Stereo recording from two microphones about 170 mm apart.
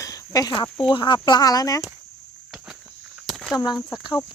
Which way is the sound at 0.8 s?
30° left (ahead or behind).